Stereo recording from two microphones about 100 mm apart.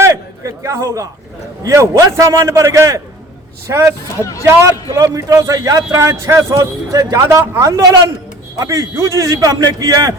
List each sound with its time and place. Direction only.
0.0 s a sound: 30° right (ahead or behind)
1.6 s a man's voice: 30° right (ahead or behind)
4.2 s a man's voice: 35° left (ahead or behind)
4.4 s a man's voice: 30° right (ahead or behind)